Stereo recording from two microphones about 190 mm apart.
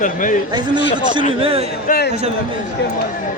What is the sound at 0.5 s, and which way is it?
A man's voice, 25° right (ahead or behind).